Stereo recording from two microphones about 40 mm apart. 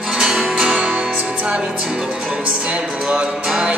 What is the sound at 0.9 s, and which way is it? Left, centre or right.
Music, right.